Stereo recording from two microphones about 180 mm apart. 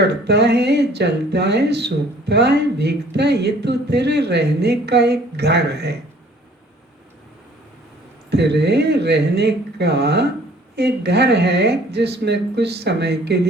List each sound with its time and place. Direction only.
0.0 s speech: 65° right (ahead or behind)
8.3 s speech: 65° right (ahead or behind)